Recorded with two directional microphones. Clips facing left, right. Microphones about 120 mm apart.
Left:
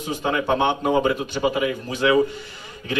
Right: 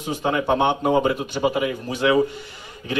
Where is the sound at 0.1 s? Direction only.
15° right (ahead or behind).